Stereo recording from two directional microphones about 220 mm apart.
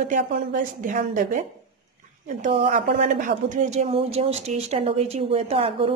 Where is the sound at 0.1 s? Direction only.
35° right (ahead or behind).